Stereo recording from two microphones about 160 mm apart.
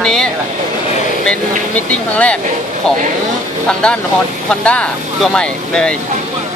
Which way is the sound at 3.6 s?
5° left (ahead or behind).